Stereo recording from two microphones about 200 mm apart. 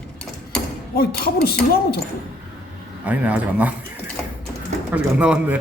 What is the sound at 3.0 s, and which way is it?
Speech, 5° right (ahead or behind).